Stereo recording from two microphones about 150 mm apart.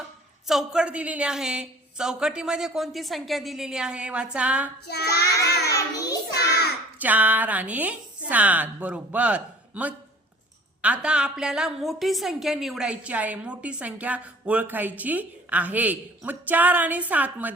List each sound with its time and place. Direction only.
0.4 s a woman's voice: 5° right (ahead or behind)
4.9 s child singing: 90° left
5.6 s child singing: 25° left (ahead or behind)
6.3 s child singing: 90° left
7.0 s a woman's voice: 10° right (ahead or behind)